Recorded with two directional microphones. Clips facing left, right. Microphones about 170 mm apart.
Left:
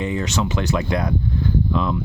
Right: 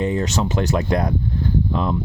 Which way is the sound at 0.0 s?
40° right (ahead or behind).